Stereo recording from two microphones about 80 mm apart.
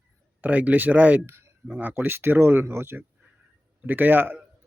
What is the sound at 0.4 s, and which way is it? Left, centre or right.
A man's voice, centre.